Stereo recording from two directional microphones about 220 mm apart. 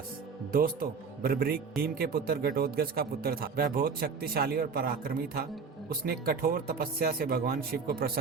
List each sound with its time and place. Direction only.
0.5 s a man's voice: 40° right (ahead or behind)